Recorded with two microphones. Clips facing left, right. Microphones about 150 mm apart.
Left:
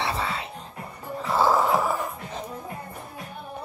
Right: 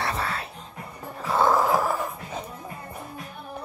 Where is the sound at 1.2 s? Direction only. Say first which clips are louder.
Even; centre (ahead or behind).